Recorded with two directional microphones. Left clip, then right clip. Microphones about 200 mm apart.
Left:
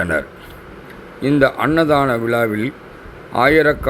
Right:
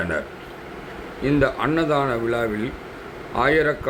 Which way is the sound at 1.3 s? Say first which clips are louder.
Left 5 dB; 25° left (ahead or behind).